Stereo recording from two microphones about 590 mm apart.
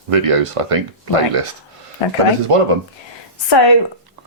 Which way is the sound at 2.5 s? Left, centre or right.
Right.